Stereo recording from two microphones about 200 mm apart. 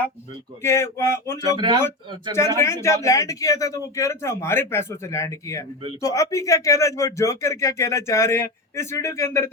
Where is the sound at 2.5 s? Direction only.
15° left (ahead or behind).